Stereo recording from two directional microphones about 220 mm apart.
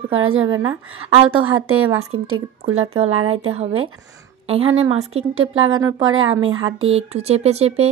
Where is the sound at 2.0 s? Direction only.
70° right (ahead or behind).